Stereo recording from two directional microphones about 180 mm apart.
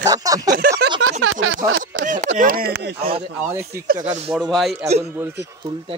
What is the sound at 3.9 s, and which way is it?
Speech, 45° right (ahead or behind).